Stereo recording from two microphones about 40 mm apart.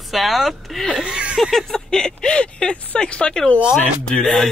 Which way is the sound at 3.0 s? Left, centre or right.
Left.